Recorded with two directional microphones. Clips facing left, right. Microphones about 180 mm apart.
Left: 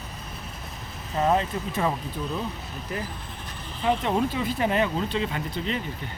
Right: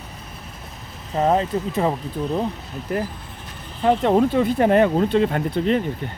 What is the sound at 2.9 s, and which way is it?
Speech, 55° right (ahead or behind).